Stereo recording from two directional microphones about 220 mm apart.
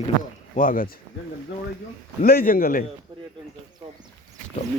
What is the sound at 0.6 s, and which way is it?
Speech, 40° left (ahead or behind).